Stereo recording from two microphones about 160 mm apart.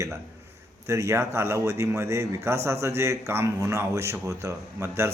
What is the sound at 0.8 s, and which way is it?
A man's voice, 20° right (ahead or behind).